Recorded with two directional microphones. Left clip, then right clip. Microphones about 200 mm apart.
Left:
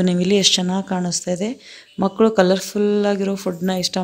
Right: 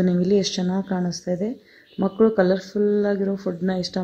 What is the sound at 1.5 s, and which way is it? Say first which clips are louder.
A man's voice: left 3 dB; 30° left (ahead or behind).